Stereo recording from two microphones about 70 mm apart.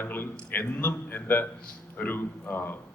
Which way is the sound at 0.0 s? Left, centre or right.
Left.